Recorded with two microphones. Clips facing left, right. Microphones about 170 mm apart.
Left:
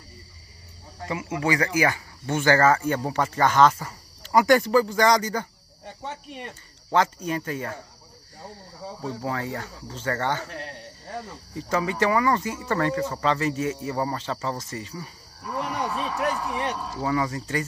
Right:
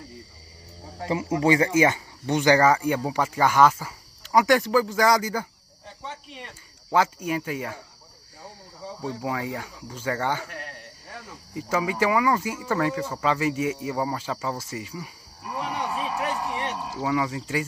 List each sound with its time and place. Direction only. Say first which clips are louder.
1.0 s speech: right 4 dB; 30° right (ahead or behind); by 5.5 s 5° right (ahead or behind)
6.0 s speech: left 3 dB; 50° left (ahead or behind)
6.9 s speech: even; 10° right (ahead or behind)
9.2 s speech: even; 10° right (ahead or behind)
11.5 s speech: even; 10° right (ahead or behind)